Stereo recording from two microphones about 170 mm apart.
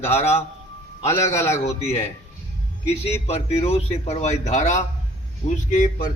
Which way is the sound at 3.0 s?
35° left (ahead or behind).